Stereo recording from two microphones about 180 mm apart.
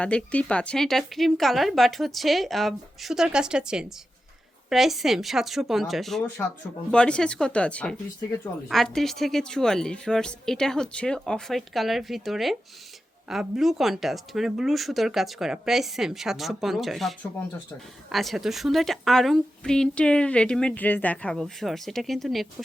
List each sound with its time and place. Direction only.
0.0 s a woman's voice: 5° left (ahead or behind)